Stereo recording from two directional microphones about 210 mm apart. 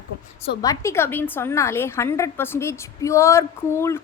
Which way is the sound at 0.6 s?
15° left (ahead or behind).